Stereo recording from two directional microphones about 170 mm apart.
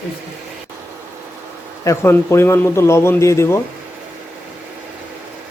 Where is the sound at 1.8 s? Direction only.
15° left (ahead or behind).